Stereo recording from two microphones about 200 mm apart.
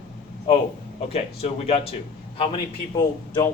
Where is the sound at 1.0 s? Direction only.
30° left (ahead or behind).